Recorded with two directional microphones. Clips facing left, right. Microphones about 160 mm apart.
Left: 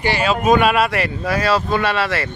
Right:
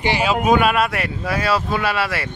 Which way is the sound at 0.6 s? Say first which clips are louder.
Left 2 dB; centre (ahead or behind).